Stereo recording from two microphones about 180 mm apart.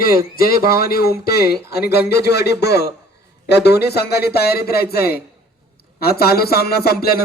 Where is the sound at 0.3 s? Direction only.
55° left (ahead or behind).